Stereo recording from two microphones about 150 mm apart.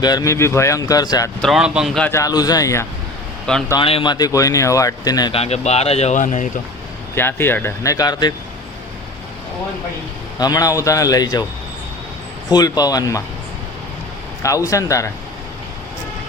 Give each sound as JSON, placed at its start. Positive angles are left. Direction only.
{"t": 0.0, "sound": "speech", "side_deg": 25}
{"t": 1.4, "sound": "speech", "side_deg": 0}
{"t": 2.0, "sound": "speech", "side_deg": 15}
{"t": 2.2, "sound": "speech", "side_deg": 25}
{"t": 3.8, "sound": "speech", "side_deg": 35}
{"t": 5.3, "sound": "speech", "side_deg": 45}
{"t": 7.2, "sound": "speech", "side_deg": 15}
{"t": 10.3, "sound": "speech", "side_deg": 25}
{"t": 12.5, "sound": "speech", "side_deg": 25}
{"t": 14.4, "sound": "speech", "side_deg": 20}